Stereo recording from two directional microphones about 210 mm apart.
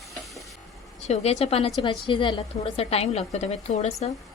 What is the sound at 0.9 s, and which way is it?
A woman's voice, 30° left (ahead or behind).